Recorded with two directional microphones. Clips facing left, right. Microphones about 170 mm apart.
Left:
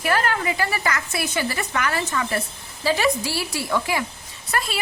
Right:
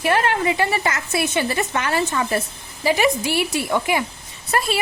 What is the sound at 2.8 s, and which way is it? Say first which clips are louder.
A woman's voice: right 2 dB; 15° right (ahead or behind).